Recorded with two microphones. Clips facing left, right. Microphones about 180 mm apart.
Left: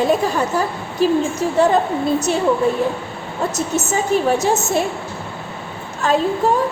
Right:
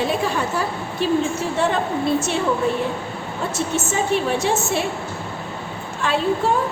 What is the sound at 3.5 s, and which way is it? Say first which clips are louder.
A woman's voice: left 1 dB; 40° left (ahead or behind).